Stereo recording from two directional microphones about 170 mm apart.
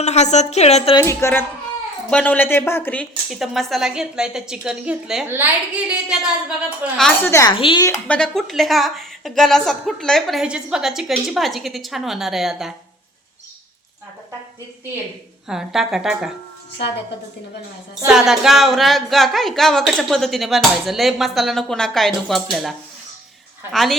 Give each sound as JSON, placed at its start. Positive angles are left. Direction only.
{"t": 0.0, "sound": "speech", "side_deg": 40}
{"t": 0.9, "sound": "a woman's voice", "side_deg": 15}
{"t": 3.2, "sound": "a woman's voice", "side_deg": 0}
{"t": 7.3, "sound": "a woman's voice", "side_deg": 15}
{"t": 7.5, "sound": "speech", "side_deg": 30}
{"t": 7.9, "sound": "a woman's voice", "side_deg": 10}
{"t": 15.4, "sound": "a woman's voice", "side_deg": 0}
{"t": 18.0, "sound": "a woman's voice", "side_deg": -5}
{"t": 23.7, "sound": "a woman's voice", "side_deg": 0}